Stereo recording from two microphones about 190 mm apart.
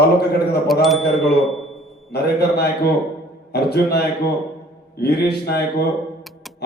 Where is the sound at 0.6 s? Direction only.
Centre (ahead or behind).